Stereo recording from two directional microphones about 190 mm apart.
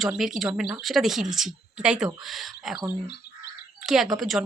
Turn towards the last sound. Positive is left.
turn(degrees=0)  # may be behind; listen again after turning